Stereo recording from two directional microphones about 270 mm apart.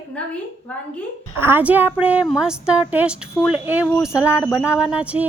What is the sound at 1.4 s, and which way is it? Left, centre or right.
A woman's voice, centre.